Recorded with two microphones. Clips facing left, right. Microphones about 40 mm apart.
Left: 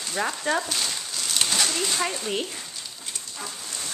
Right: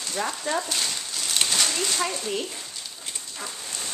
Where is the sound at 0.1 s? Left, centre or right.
Centre.